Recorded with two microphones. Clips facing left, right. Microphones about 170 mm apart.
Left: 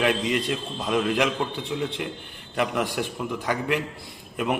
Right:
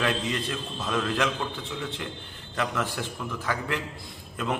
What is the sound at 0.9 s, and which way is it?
Speech, 15° left (ahead or behind).